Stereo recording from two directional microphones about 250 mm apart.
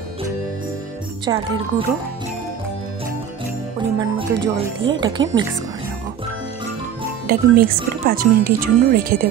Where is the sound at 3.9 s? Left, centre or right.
Right.